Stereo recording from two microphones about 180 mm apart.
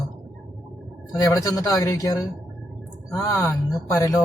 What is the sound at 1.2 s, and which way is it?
Speech, 20° left (ahead or behind).